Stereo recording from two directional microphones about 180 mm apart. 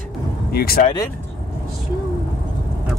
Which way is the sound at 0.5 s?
60° left (ahead or behind).